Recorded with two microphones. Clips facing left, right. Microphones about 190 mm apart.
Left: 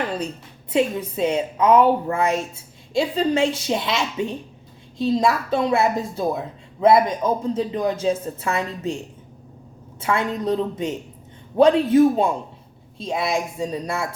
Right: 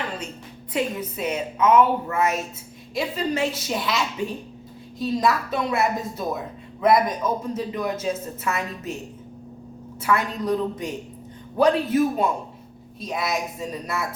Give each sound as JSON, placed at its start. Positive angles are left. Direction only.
{"t": 0.7, "sound": "speech", "side_deg": 25}
{"t": 10.0, "sound": "speech", "side_deg": 25}